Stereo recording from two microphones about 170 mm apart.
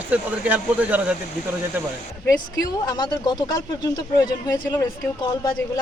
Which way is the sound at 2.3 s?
20° left (ahead or behind).